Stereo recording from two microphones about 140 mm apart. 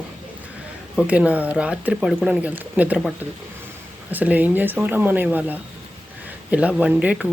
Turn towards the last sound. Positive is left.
turn(degrees=-10)  # may be behind; listen again after turning